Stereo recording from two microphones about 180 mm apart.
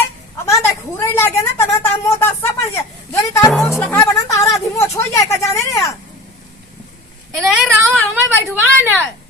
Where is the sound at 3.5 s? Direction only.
Centre (ahead or behind).